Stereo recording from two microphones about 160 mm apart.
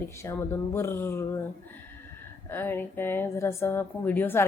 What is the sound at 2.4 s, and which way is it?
Speech, 15° left (ahead or behind).